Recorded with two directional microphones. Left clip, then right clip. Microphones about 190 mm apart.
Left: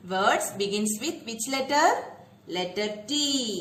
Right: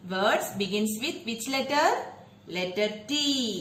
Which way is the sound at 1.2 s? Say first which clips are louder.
Even; 65° left (ahead or behind).